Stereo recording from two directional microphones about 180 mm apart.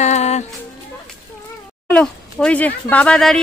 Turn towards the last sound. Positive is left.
turn(degrees=5)  # may be behind; listen again after turning